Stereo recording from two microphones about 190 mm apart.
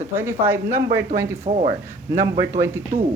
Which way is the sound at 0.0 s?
10° right (ahead or behind).